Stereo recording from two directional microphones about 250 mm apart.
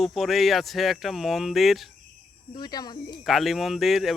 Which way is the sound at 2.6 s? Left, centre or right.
Centre.